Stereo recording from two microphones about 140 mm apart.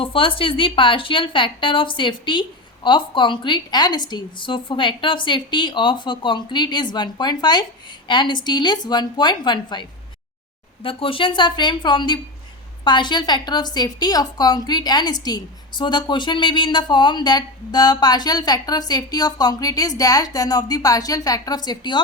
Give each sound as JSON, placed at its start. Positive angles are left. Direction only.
{"t": 0.0, "sound": "a woman's voice", "side_deg": 40}
{"t": 10.8, "sound": "a woman's voice", "side_deg": 40}